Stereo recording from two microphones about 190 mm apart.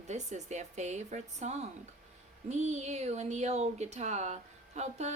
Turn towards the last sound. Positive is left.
turn(degrees=-35)  # may be behind; listen again after turning